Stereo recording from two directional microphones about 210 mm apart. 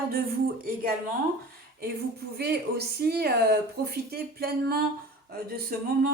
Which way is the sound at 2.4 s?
50° right (ahead or behind).